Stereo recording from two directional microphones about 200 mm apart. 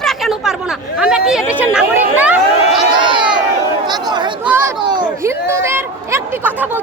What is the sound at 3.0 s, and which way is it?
Speech, 25° right (ahead or behind).